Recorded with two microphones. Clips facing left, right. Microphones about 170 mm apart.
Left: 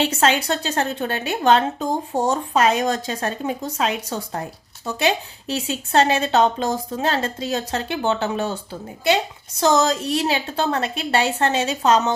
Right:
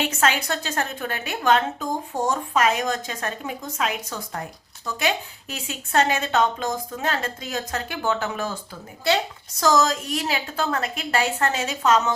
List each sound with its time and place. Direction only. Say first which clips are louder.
0.0 s a woman's voice: left 4 dB; 30° left (ahead or behind)
9.6 s a woman's voice: left 2 dB; 25° left (ahead or behind)